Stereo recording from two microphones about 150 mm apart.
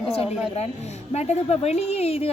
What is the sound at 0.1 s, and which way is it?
A woman's voice, 40° left (ahead or behind).